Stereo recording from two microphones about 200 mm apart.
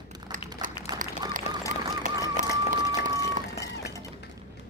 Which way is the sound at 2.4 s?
40° right (ahead or behind).